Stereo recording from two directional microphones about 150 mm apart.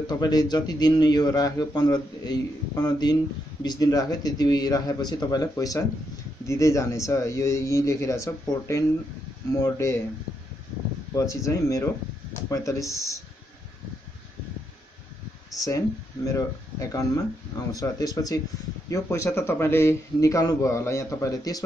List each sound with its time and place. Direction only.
0.0 s speech: 25° left (ahead or behind)
11.4 s speech: 20° left (ahead or behind)
15.5 s speech: 25° left (ahead or behind)